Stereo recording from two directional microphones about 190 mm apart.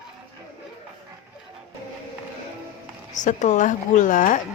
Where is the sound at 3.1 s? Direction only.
40° left (ahead or behind).